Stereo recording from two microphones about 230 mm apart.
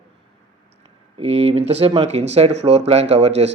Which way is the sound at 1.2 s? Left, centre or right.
Right.